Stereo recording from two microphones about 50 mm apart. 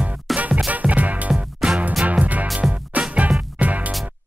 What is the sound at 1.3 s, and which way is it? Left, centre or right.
Music, centre.